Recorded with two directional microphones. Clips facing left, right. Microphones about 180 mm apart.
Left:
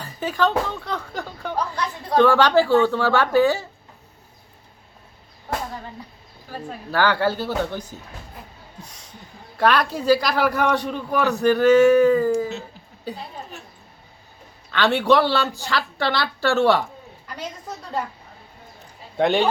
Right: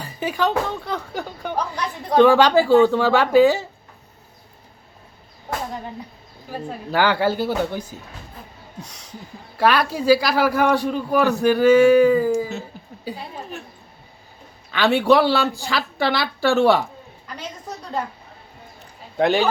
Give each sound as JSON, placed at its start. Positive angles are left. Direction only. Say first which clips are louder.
{"t": 0.0, "sound": "speech", "louder": "even", "side_deg": -10}
{"t": 6.9, "sound": "speech", "louder": "right 1 dB", "side_deg": -15}
{"t": 9.6, "sound": "speech", "louder": "right 1 dB", "side_deg": -5}
{"t": 14.7, "sound": "speech", "louder": "right 2 dB", "side_deg": -15}
{"t": 19.1, "sound": "speech", "louder": "right 1 dB", "side_deg": 0}